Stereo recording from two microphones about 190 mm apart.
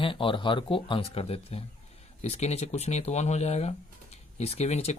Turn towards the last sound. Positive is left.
turn(degrees=35)  # may be behind; listen again after turning